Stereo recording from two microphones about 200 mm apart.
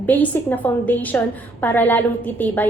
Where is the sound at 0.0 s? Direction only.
10° left (ahead or behind).